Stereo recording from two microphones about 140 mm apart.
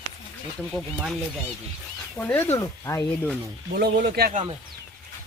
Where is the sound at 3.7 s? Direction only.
90° right.